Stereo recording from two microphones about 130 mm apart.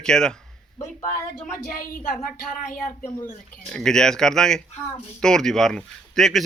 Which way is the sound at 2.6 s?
90° left.